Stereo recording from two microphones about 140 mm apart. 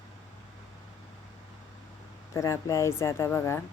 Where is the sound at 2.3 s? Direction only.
20° left (ahead or behind).